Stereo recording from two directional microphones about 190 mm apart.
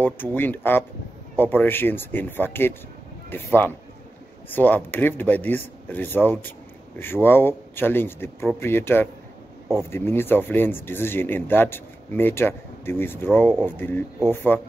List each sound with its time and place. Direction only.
0.0 s speech: 10° left (ahead or behind)
4.5 s speech: 10° left (ahead or behind)